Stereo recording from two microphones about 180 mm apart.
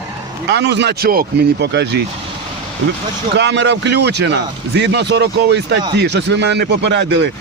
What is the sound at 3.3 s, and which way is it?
Speech, 80° right.